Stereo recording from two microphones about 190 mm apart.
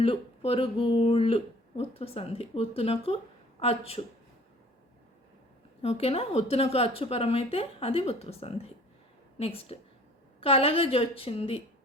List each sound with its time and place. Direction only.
0.0 s a woman's voice: 30° left (ahead or behind)
5.8 s a woman's voice: 30° left (ahead or behind)